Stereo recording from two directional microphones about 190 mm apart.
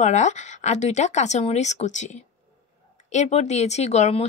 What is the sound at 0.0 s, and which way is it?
Speech, 40° left (ahead or behind).